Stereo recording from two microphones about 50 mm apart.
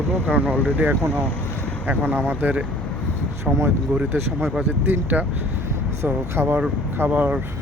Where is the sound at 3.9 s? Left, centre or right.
Right.